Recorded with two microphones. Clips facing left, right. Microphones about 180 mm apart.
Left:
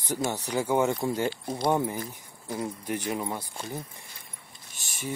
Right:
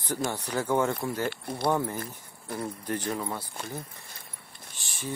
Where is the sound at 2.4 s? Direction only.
15° left (ahead or behind).